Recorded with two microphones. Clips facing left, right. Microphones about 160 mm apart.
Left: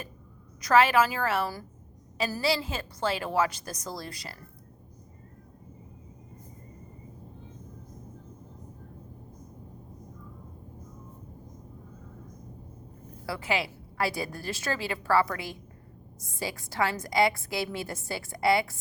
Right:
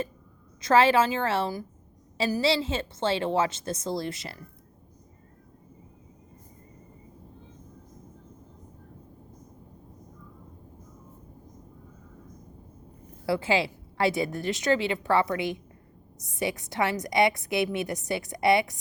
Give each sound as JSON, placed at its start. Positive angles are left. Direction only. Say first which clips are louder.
{"t": 0.6, "sound": "a woman's voice", "louder": "right 1 dB", "side_deg": -30}
{"t": 13.2, "sound": "a woman's voice", "louder": "right 5 dB", "side_deg": -25}